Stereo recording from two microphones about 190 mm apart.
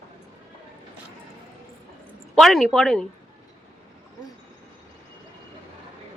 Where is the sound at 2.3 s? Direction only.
Centre (ahead or behind).